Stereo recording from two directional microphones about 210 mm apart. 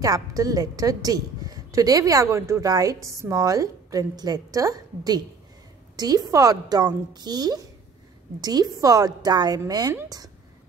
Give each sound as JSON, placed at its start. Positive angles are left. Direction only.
{"t": 0.0, "sound": "a woman's voice", "side_deg": -15}